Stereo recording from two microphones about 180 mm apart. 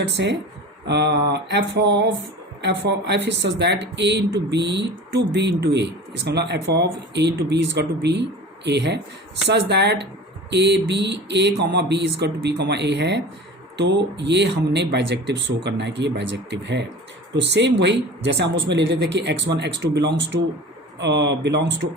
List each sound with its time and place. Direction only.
0.9 s speech: 70° right (ahead or behind); by 20.4 s 90° right
21.0 s speech: 75° right (ahead or behind)